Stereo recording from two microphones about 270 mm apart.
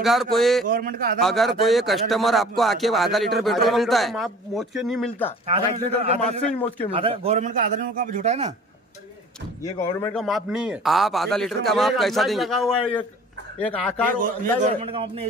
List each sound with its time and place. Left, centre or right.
0.0 s speech: centre
0.7 s a man's voice: right
1.2 s speech: centre
5.9 s a man's voice: right
9.6 s speech: centre
14.6 s a man's voice: centre